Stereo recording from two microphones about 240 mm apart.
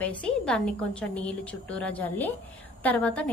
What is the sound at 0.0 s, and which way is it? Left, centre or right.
A woman's voice, centre.